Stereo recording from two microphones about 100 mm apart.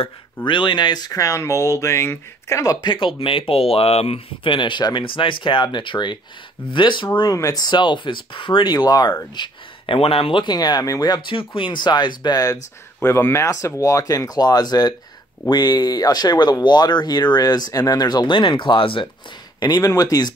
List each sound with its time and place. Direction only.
0.5 s speech: 55° left (ahead or behind); by 2.9 s 35° left (ahead or behind)
2.9 s speech: 55° left (ahead or behind)
7.3 s speech: 35° left (ahead or behind)
9.9 s speech: 70° left (ahead or behind)
10.4 s speech: 45° left (ahead or behind)
13.0 s speech: 25° left (ahead or behind); by 19.0 s 60° left (ahead or behind)
19.6 s speech: 45° left (ahead or behind)